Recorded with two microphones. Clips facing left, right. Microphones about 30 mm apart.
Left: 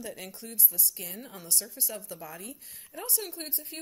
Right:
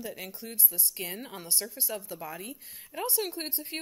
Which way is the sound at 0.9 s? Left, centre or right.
Right.